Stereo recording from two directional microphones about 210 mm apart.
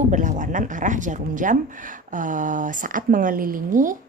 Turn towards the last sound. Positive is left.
turn(degrees=-40)  # may be behind; listen again after turning